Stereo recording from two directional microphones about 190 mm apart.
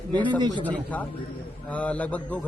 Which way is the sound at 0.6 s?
10° left (ahead or behind).